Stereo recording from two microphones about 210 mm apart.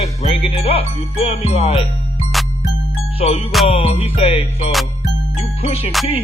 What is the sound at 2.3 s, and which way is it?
Music, centre (ahead or behind).